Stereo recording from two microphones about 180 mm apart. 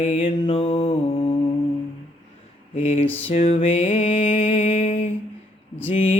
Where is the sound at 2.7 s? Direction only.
40° left (ahead or behind).